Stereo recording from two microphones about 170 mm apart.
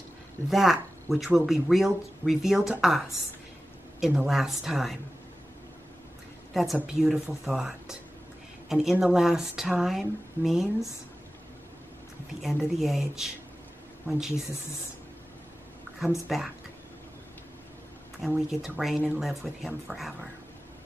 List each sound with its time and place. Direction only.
0.5 s speech: centre (ahead or behind)
4.0 s speech: 5° right (ahead or behind)
6.5 s speech: centre (ahead or behind)
12.4 s speech: centre (ahead or behind)
16.3 s speech: centre (ahead or behind)
18.2 s speech: centre (ahead or behind)